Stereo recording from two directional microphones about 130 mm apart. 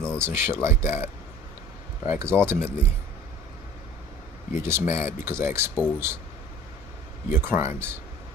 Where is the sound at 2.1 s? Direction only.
20° right (ahead or behind).